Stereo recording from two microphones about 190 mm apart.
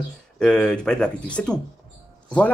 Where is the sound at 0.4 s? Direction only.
5° left (ahead or behind).